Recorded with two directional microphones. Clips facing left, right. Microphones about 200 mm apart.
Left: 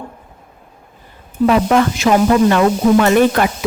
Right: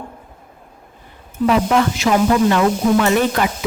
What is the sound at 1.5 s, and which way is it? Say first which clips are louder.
Speech: left 2 dB; 50° left (ahead or behind).